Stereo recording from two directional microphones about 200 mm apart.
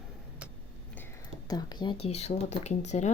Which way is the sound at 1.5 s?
20° left (ahead or behind).